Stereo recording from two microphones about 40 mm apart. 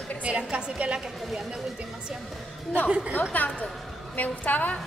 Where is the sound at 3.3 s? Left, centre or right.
Left.